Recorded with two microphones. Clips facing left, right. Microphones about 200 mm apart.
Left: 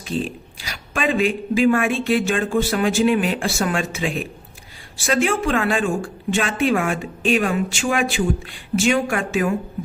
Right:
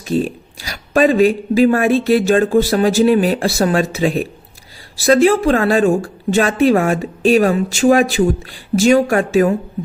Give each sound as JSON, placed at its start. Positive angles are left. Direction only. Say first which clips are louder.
{"t": 0.1, "sound": "speech", "louder": "right 7 dB", "side_deg": -45}